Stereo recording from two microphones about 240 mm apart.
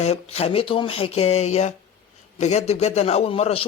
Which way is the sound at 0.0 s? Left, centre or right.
Left.